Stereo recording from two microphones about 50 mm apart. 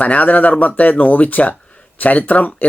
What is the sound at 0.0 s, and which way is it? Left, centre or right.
Speech, left.